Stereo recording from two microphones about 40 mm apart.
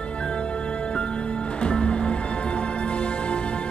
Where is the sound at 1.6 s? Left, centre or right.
Left.